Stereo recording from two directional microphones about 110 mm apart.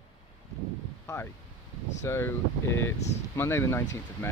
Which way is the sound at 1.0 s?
25° left (ahead or behind).